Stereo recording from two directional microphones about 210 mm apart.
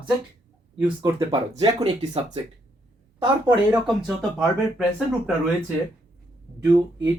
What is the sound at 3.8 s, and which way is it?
Speech, centre (ahead or behind).